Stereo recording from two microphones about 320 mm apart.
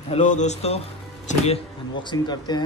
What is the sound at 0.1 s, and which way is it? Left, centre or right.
Speech, left.